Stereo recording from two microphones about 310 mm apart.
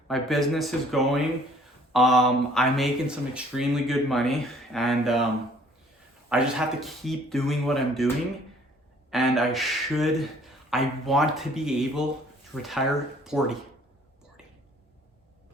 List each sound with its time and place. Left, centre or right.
0.1 s speech: centre
6.2 s speech: centre